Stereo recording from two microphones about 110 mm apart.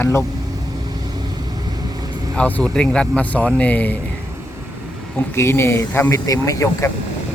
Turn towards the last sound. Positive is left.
turn(degrees=30)  # may be behind; listen again after turning